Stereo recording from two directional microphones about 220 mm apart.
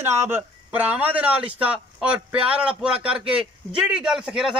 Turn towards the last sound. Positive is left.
turn(degrees=-5)  # may be behind; listen again after turning